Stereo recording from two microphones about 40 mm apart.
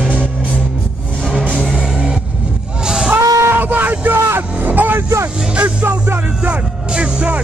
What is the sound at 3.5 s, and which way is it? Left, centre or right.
Vehicle, right.